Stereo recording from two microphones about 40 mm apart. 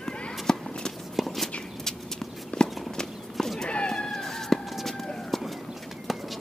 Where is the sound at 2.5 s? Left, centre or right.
Left.